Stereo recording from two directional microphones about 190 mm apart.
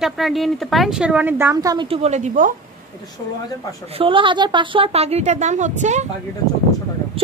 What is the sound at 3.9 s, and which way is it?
A woman's voice, 25° right (ahead or behind).